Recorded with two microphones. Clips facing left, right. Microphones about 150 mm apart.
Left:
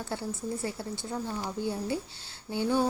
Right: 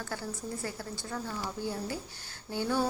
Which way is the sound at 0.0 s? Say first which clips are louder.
Left 3 dB; 20° left (ahead or behind).